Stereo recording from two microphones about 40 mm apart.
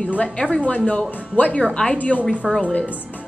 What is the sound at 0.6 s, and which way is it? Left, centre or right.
A woman's voice, left.